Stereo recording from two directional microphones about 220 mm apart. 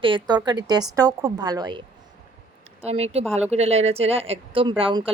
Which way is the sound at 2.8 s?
30° right (ahead or behind).